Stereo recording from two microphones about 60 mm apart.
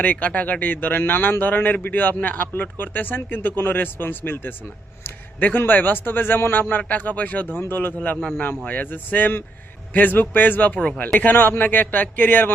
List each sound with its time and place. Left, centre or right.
0.0 s a man's voice: left
10.8 s speech: centre
11.0 s a man's voice: left